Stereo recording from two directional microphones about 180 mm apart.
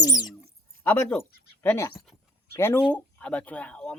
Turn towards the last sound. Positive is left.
turn(degrees=5)  # may be behind; listen again after turning